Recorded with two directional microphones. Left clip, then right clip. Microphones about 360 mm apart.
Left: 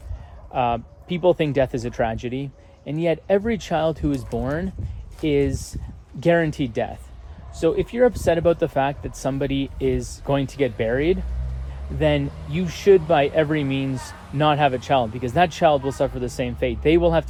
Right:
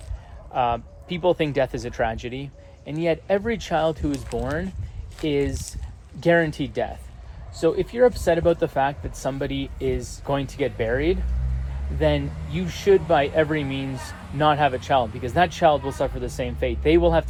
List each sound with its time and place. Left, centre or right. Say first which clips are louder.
0.5 s speech: left 1 dB; left
12.8 s speech: left 2 dB; left
13.7 s speech: left 3 dB; centre
14.3 s speech: left 1 dB; left
15.7 s speech: left 2 dB; left
16.4 s speech: left 2 dB; left